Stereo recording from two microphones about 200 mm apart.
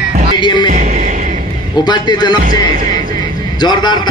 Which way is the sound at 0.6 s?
40° right (ahead or behind).